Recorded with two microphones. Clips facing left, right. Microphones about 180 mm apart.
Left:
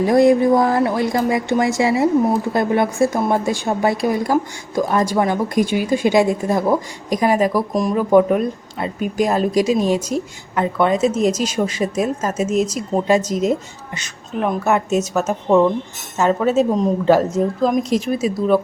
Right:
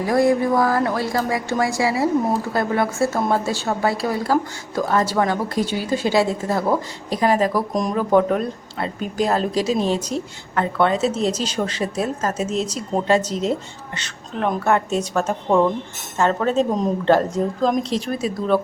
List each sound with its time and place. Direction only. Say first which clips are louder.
0.0 s a woman's voice: left 5 dB; 20° left (ahead or behind)